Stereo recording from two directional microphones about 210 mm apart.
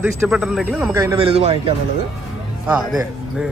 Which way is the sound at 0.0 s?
5° right (ahead or behind).